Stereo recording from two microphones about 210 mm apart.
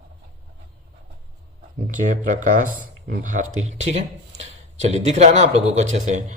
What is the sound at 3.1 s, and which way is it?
Speech, 40° right (ahead or behind).